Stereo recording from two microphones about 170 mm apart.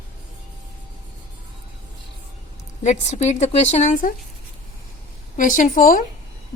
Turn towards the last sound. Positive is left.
turn(degrees=55)  # may be behind; listen again after turning